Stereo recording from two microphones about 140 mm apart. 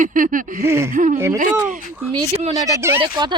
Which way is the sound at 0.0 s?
75° right (ahead or behind).